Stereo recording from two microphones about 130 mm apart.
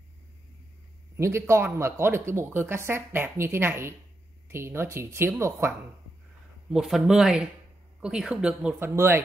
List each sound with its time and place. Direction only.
1.1 s speech: 20° right (ahead or behind)
6.7 s speech: 5° right (ahead or behind)
8.7 s speech: 20° right (ahead or behind)